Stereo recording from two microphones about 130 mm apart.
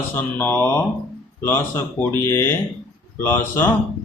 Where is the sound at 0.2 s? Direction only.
15° left (ahead or behind).